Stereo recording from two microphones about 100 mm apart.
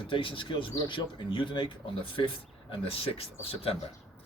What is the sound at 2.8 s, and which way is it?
Speech, 70° left (ahead or behind).